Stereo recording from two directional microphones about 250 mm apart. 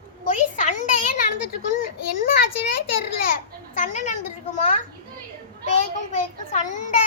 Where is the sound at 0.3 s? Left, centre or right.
Left.